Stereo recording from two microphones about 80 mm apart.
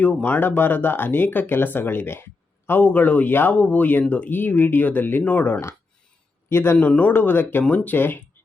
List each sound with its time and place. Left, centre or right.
0.0 s speech: left
6.7 s speech: centre